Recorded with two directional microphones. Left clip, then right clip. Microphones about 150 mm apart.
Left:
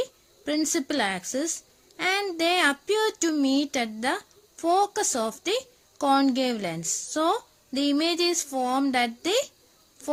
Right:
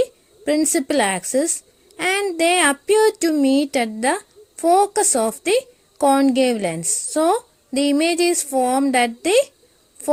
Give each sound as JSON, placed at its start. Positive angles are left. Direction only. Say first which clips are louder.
{"t": 0.0, "sound": "speech", "louder": "right 10 dB", "side_deg": -25}
{"t": 2.0, "sound": "a sound", "louder": "right 5 dB", "side_deg": -25}
{"t": 2.3, "sound": "a woman's voice", "louder": "right 7 dB", "side_deg": -25}